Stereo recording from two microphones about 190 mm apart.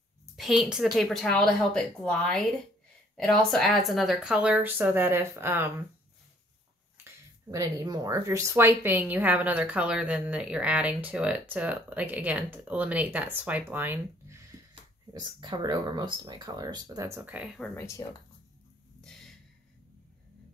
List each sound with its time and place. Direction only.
0.4 s speech: 5° right (ahead or behind)
7.5 s a woman's voice: 15° right (ahead or behind)
15.1 s speech: 20° right (ahead or behind); by 17.6 s 5° right (ahead or behind)
17.7 s speech: 15° left (ahead or behind)
18.9 s a sound: centre (ahead or behind)